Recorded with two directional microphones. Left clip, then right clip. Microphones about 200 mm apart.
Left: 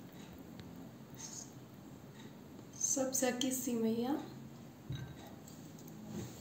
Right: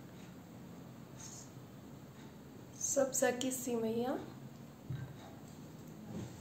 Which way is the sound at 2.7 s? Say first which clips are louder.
Right 2 dB; 55° right (ahead or behind).